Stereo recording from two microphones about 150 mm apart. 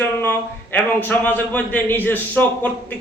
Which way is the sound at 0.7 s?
10° left (ahead or behind).